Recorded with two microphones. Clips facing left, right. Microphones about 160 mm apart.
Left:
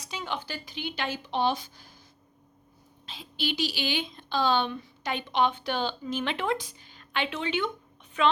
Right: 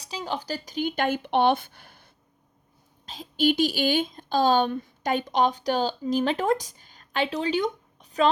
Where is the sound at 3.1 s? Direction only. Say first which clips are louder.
Right 10 dB; 45° right (ahead or behind).